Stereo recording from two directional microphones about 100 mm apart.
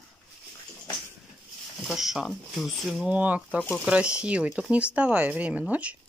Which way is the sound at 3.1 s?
15° right (ahead or behind).